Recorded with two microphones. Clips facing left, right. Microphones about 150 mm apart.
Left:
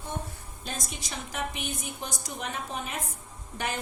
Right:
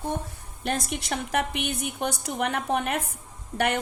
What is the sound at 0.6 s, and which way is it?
A woman's voice, 65° right (ahead or behind).